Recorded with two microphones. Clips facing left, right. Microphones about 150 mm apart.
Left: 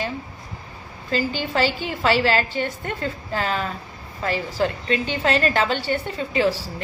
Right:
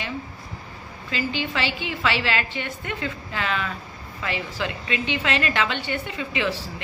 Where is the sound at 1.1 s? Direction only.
40° left (ahead or behind).